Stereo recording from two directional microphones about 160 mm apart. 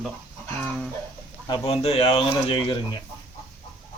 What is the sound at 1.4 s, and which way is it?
Speech, 30° left (ahead or behind).